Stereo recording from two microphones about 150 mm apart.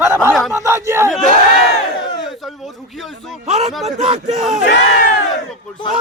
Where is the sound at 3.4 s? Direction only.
45° right (ahead or behind).